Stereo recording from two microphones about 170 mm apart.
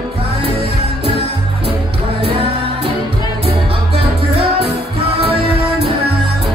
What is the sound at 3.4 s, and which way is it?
Music, 35° right (ahead or behind).